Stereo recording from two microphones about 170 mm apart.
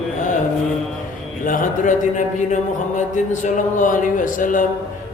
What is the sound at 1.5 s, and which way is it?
Speech, 50° left (ahead or behind).